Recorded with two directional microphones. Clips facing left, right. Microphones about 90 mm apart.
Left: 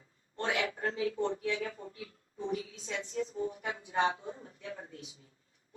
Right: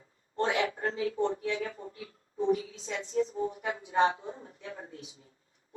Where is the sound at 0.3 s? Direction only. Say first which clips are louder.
Right 4 dB; 30° right (ahead or behind).